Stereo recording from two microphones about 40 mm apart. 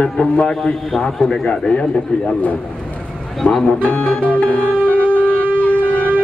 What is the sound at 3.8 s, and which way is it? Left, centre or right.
Music, left.